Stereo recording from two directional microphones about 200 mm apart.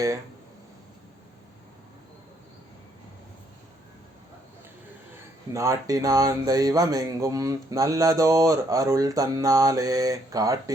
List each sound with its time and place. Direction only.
5.5 s speech: 15° right (ahead or behind)